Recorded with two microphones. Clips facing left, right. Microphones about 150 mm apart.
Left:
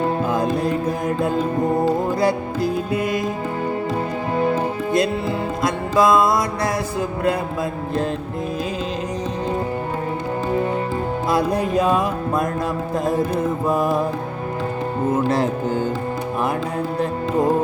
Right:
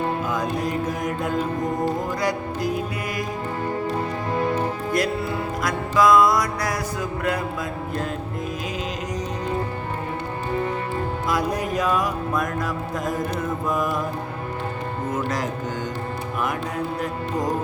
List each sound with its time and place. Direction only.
0.3 s music: 30° left (ahead or behind)
4.9 s music: 25° left (ahead or behind)
11.3 s music: 30° left (ahead or behind)
13.7 s music: 30° left (ahead or behind)
15.1 s music: 30° left (ahead or behind)
17.0 s music: 25° left (ahead or behind)